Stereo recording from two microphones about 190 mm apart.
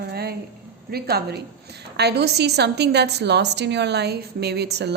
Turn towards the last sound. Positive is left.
turn(degrees=-60)  # may be behind; listen again after turning